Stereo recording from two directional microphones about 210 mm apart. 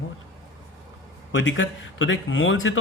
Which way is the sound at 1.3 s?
65° left (ahead or behind).